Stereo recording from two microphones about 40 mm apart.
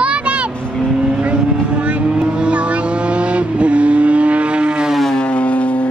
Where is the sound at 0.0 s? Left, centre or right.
Right.